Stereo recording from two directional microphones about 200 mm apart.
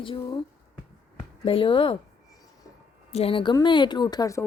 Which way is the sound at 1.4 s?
25° left (ahead or behind).